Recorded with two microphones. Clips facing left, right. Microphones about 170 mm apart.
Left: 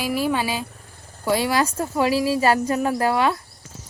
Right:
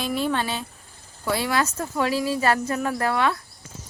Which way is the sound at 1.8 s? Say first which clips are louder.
Left 4 dB; 10° left (ahead or behind).